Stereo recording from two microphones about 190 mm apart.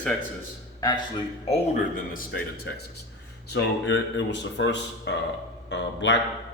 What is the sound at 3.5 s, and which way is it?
Speech, 70° left (ahead or behind).